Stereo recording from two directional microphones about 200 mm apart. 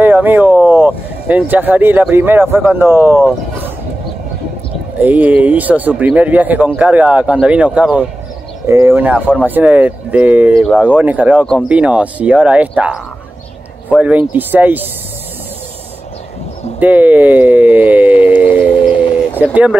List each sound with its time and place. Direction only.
0.0 s speech: 10° right (ahead or behind)
4.9 s speech: 10° right (ahead or behind)
16.8 s speech: 10° right (ahead or behind)
18.4 s a sound: 25° left (ahead or behind)
19.3 s speech: 5° right (ahead or behind)